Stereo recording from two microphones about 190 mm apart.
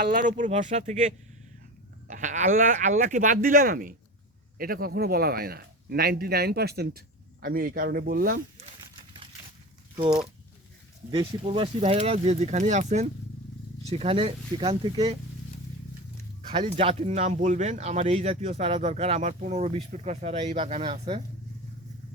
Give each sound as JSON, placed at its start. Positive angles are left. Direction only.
{"t": 0.0, "sound": "a man's voice", "side_deg": -50}
{"t": 8.8, "sound": "a sound", "side_deg": -25}
{"t": 11.4, "sound": "speech", "side_deg": -30}
{"t": 14.7, "sound": "speech", "side_deg": -20}
{"t": 16.5, "sound": "speech", "side_deg": -30}